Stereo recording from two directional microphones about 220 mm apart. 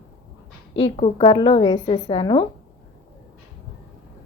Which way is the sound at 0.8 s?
25° left (ahead or behind).